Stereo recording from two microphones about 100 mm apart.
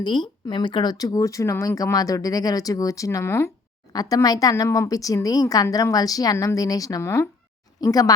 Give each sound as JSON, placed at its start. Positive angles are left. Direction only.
{"t": 0.0, "sound": "speech", "side_deg": 50}
{"t": 3.9, "sound": "speech", "side_deg": 40}
{"t": 7.8, "sound": "speech", "side_deg": 40}